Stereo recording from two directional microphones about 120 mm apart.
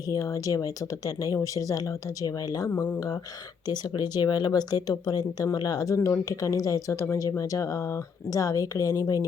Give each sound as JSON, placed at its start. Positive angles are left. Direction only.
{"t": 0.1, "sound": "speech", "side_deg": 30}
{"t": 3.7, "sound": "speech", "side_deg": 35}